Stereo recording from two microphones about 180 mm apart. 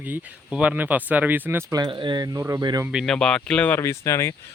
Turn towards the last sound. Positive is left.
turn(degrees=15)  # may be behind; listen again after turning